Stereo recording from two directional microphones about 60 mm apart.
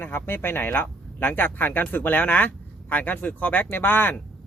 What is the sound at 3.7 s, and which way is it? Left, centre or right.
Speech, left.